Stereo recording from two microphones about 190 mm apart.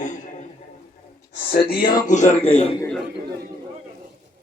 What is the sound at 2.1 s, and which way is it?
Speech, 35° left (ahead or behind).